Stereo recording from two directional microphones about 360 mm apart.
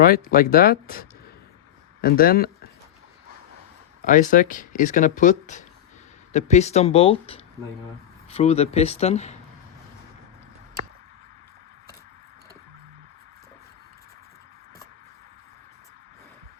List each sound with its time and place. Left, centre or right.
0.0 s speech: left
4.0 s speech: left